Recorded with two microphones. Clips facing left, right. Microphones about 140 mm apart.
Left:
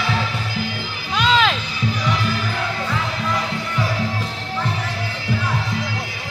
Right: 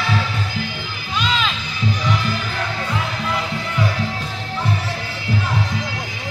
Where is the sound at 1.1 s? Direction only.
65° left (ahead or behind).